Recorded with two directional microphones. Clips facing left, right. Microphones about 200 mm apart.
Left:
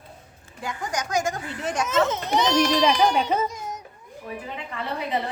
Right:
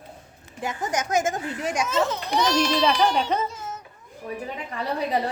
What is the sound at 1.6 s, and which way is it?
Speech, 10° right (ahead or behind).